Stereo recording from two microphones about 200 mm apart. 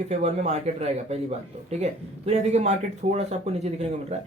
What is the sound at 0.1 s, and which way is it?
Speech, 35° right (ahead or behind).